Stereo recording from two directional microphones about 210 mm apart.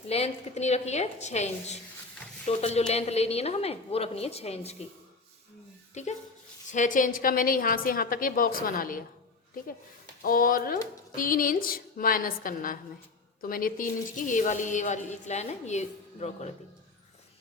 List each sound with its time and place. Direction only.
0.1 s a woman's voice: 30° left (ahead or behind)
5.9 s a woman's voice: 35° left (ahead or behind)
10.2 s a woman's voice: 40° left (ahead or behind)